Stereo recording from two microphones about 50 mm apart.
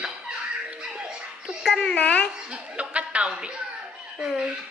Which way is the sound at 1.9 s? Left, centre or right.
Left.